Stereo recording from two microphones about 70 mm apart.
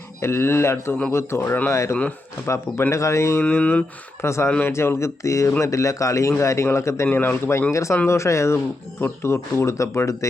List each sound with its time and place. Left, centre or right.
0.2 s speech: left
3.5 s speech: centre
4.2 s speech: left
7.7 s speech: left